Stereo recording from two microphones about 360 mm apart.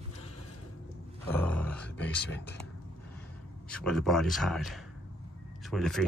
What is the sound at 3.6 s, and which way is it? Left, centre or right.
Speech, centre.